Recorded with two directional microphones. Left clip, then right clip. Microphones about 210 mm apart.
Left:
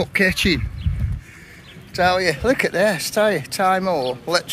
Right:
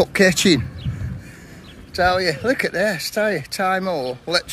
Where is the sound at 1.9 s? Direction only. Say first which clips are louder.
Even; 10° right (ahead or behind).